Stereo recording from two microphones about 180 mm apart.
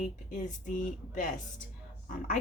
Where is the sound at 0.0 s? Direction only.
45° left (ahead or behind).